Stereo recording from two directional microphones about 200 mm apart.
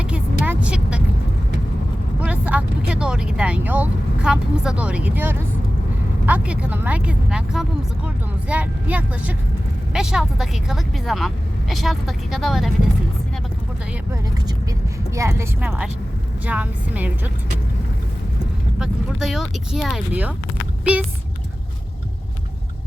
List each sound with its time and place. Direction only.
0.0 s vehicle: 5° right (ahead or behind)
2.2 s speech: 5° right (ahead or behind)
14.1 s speech: 20° right (ahead or behind)
18.8 s speech: centre (ahead or behind)